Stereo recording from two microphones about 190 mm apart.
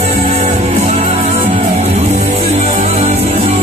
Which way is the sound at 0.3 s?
35° right (ahead or behind).